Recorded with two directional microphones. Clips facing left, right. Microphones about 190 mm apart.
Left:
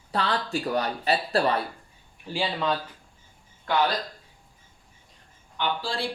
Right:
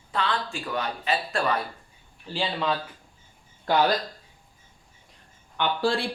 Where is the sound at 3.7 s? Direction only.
35° right (ahead or behind).